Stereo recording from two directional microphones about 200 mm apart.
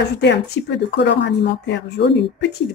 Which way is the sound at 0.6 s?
60° left (ahead or behind).